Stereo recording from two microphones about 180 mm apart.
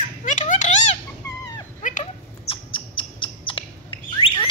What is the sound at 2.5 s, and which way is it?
Bird, 30° left (ahead or behind).